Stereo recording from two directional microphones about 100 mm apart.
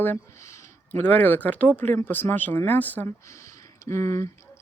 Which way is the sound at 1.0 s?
15° left (ahead or behind).